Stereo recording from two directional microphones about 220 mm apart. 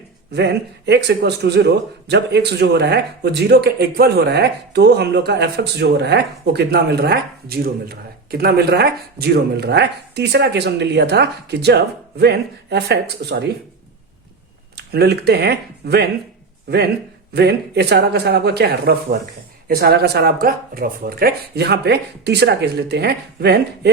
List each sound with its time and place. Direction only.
0.3 s a man's voice: 50° right (ahead or behind)
14.8 s a man's voice: 50° right (ahead or behind)